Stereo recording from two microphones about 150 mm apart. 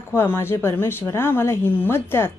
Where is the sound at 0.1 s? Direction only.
15° left (ahead or behind).